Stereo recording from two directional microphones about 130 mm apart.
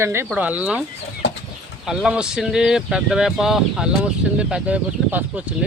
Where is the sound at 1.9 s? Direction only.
5° right (ahead or behind).